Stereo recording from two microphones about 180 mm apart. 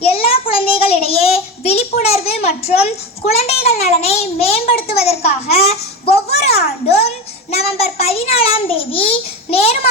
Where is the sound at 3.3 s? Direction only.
35° left (ahead or behind).